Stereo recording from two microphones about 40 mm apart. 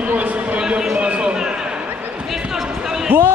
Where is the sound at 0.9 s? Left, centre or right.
Right.